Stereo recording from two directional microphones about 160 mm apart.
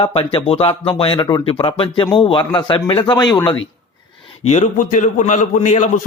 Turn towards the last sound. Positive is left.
turn(degrees=50)  # may be behind; listen again after turning